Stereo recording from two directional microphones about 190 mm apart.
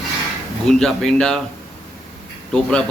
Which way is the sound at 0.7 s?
5° left (ahead or behind).